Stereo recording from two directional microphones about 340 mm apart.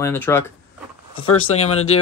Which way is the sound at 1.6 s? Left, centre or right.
Centre.